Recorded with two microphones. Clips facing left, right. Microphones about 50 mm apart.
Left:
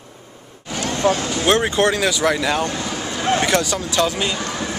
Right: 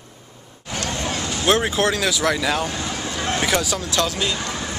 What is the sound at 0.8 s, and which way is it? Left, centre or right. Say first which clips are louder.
Vehicle: left 4 dB; centre.